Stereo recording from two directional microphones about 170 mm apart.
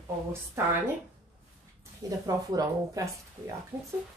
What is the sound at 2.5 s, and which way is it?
Speech, 20° right (ahead or behind).